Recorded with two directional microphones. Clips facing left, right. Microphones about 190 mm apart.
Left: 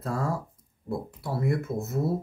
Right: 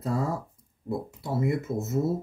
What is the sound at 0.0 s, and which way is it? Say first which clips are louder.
Speech: right 1 dB; 20° right (ahead or behind).